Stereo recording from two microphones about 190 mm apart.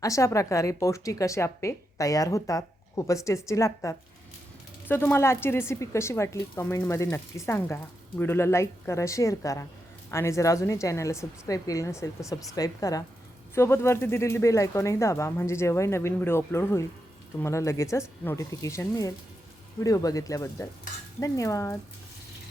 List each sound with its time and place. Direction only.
0.0 s a woman's voice: 15° left (ahead or behind)